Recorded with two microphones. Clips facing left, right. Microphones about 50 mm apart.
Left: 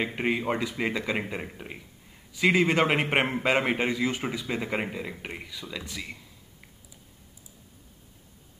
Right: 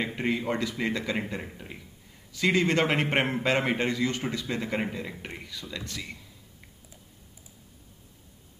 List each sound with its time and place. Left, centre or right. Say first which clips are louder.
0.0 s a man's voice: left 1 dB; centre